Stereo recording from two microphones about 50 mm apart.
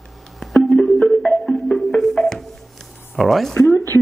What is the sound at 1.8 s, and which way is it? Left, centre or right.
Music, centre.